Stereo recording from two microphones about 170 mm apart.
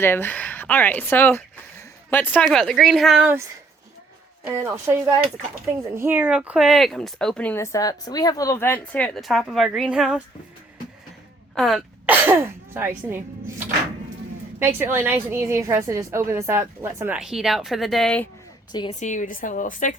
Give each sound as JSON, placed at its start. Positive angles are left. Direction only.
{"t": 0.0, "sound": "speech", "side_deg": 15}
{"t": 4.4, "sound": "a woman's voice", "side_deg": -15}
{"t": 11.5, "sound": "throat clearing", "side_deg": 0}
{"t": 12.1, "sound": "speech", "side_deg": -10}
{"t": 14.6, "sound": "a woman's voice", "side_deg": -15}
{"t": 18.9, "sound": "a woman's voice", "side_deg": 45}